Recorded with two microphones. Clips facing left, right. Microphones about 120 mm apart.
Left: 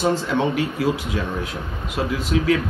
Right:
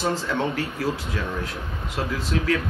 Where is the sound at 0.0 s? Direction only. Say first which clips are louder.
Left 4 dB; 20° left (ahead or behind).